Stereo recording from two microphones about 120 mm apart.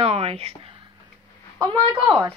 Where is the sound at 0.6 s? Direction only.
45° right (ahead or behind).